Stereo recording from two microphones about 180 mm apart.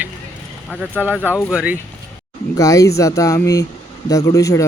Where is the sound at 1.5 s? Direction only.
5° right (ahead or behind).